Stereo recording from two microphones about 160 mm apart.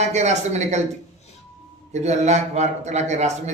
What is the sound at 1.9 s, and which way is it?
A man's voice, 45° right (ahead or behind).